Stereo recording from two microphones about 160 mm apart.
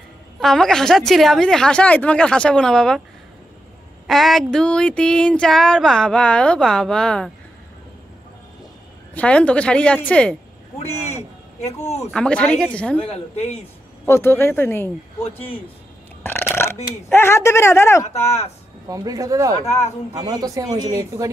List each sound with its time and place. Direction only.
0.4 s a sound: 5° left (ahead or behind)
4.1 s a sound: centre (ahead or behind)
9.1 s speech: 10° left (ahead or behind)
12.1 s speech: 5° left (ahead or behind)
14.0 s speech: 15° left (ahead or behind)
15.3 s speech: 35° left (ahead or behind)
16.2 s burping: 15° left (ahead or behind)
17.1 s speech: 15° left (ahead or behind)
18.1 s speech: 40° left (ahead or behind)
18.9 s speech: 20° right (ahead or behind)